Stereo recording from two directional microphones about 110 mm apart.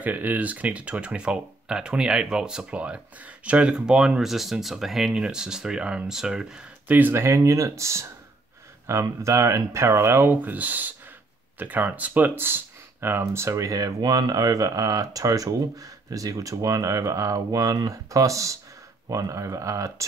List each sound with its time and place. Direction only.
0.0 s speech: 15° right (ahead or behind)